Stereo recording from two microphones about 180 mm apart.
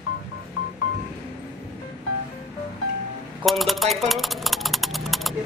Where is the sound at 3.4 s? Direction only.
Centre (ahead or behind).